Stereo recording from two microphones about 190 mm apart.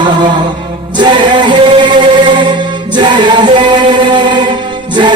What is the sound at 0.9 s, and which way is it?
Music, 25° right (ahead or behind).